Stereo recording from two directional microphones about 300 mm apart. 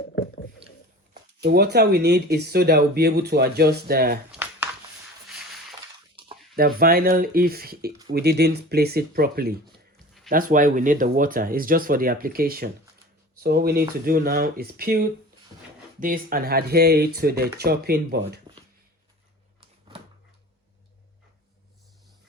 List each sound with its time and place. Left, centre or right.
1.4 s speech: right
4.3 s a sound: centre
6.6 s speech: right